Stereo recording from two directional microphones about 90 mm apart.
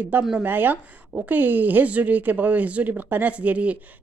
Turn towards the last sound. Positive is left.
turn(degrees=-15)  # may be behind; listen again after turning